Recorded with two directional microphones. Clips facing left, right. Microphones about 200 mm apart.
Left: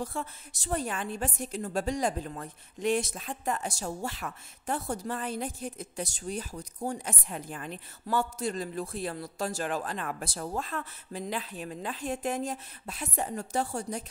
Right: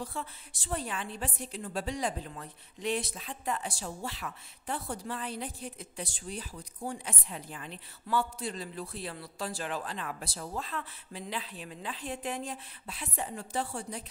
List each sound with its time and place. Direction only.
0.0 s a woman's voice: 45° left (ahead or behind)